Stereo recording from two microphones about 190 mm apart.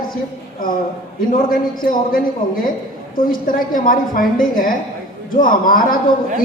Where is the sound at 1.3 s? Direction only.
45° left (ahead or behind).